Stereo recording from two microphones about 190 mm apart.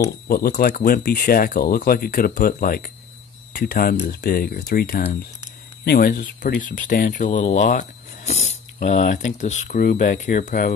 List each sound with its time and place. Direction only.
0.3 s speech: 50° left (ahead or behind)